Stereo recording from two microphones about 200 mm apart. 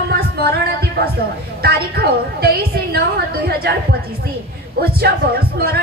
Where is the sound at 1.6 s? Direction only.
50° right (ahead or behind).